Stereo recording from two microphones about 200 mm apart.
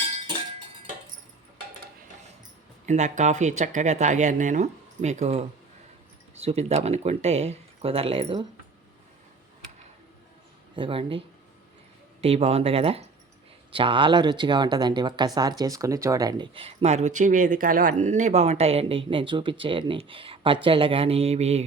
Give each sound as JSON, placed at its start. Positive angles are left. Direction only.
{"t": 2.8, "sound": "speech", "side_deg": -35}
{"t": 10.8, "sound": "speech", "side_deg": -25}
{"t": 12.2, "sound": "speech", "side_deg": -30}